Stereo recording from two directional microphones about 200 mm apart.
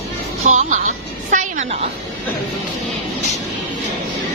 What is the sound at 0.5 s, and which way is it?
A woman's voice, 35° right (ahead or behind).